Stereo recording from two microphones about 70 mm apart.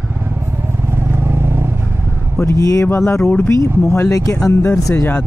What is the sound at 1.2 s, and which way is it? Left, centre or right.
Vehicle, right.